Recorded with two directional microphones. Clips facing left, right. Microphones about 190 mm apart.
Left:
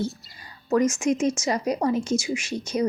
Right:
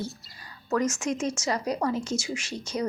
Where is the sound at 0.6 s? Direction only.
15° left (ahead or behind).